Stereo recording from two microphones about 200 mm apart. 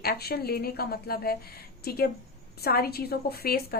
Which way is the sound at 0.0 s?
50° left (ahead or behind).